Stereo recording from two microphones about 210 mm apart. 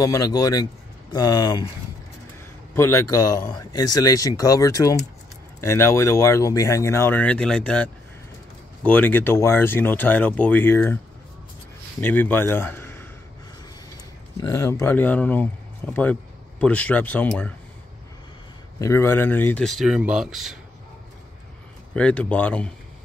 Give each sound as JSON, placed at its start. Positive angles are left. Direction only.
{"t": 0.0, "sound": "speech", "side_deg": 15}
{"t": 2.7, "sound": "speech", "side_deg": 10}
{"t": 12.0, "sound": "speech", "side_deg": 10}
{"t": 14.3, "sound": "speech", "side_deg": 15}
{"t": 18.8, "sound": "speech", "side_deg": 10}
{"t": 21.9, "sound": "speech", "side_deg": 5}